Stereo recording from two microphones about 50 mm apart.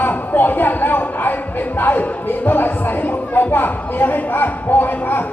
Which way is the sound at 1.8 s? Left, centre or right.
Left.